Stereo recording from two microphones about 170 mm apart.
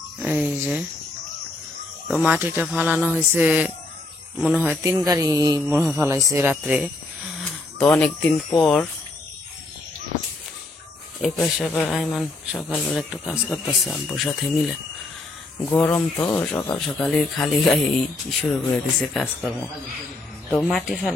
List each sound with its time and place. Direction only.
0.2 s a sound: 10° right (ahead or behind)
2.0 s speech: 10° right (ahead or behind)
5.0 s mantra: 20° right (ahead or behind)
5.9 s speech: 15° right (ahead or behind)
7.8 s speech: 10° left (ahead or behind)
11.2 s speech: centre (ahead or behind)
16.8 s speech: centre (ahead or behind)